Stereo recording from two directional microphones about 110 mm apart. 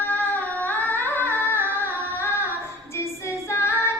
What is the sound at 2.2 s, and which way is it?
Singing, 20° left (ahead or behind).